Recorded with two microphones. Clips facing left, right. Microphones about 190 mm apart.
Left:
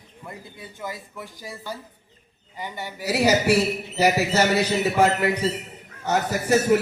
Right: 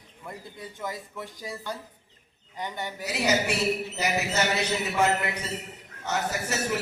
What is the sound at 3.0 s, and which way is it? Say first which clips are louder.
A man's voice: left 7 dB; 60° left (ahead or behind).